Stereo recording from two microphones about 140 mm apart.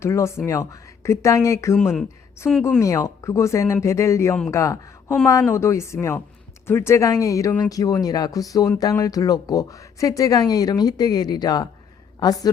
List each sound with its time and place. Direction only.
0.0 s speech: 20° left (ahead or behind)
1.7 s speech: centre (ahead or behind)
2.8 s speech: 20° left (ahead or behind)